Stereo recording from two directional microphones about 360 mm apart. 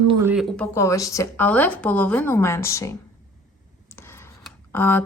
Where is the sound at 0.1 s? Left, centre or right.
Centre.